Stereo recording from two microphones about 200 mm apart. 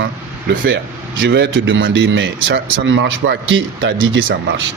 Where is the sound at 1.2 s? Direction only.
65° right (ahead or behind).